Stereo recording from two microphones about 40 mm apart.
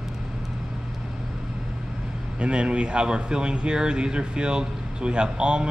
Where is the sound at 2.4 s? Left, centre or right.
Right.